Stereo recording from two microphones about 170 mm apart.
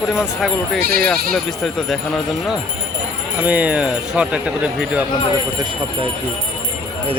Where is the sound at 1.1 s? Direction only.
5° left (ahead or behind).